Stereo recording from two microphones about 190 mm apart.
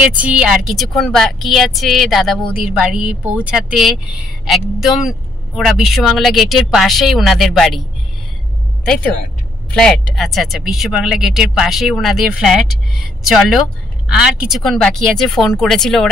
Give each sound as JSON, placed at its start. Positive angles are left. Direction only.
{"t": 0.2, "sound": "a woman's voice", "side_deg": -5}
{"t": 8.8, "sound": "a woman's voice", "side_deg": 5}